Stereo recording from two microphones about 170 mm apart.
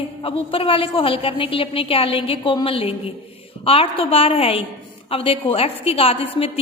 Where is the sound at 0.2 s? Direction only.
30° left (ahead or behind).